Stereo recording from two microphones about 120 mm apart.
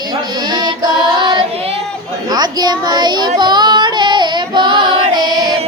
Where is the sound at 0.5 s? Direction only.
35° right (ahead or behind).